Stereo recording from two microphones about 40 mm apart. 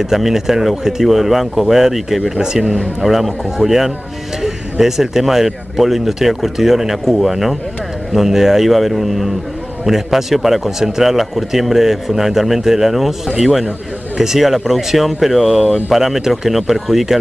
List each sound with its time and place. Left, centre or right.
0.0 s speech: centre
2.3 s speech: centre
3.0 s speech: centre
14.1 s speech: centre